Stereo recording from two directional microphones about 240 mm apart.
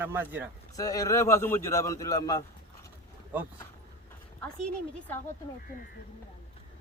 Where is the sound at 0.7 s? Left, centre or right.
Centre.